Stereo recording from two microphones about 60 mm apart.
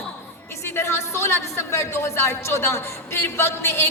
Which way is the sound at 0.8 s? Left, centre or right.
Left.